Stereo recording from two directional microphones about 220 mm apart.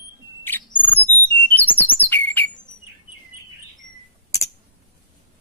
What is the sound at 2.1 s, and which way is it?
Squawk, 10° left (ahead or behind).